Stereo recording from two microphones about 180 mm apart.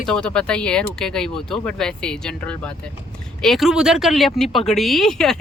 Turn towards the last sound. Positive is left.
turn(degrees=0)  # may be behind; listen again after turning